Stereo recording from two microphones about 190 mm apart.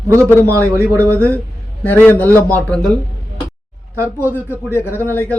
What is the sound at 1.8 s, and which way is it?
Speech, 10° left (ahead or behind).